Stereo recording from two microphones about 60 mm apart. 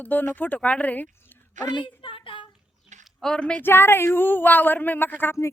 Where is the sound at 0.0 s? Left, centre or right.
Left.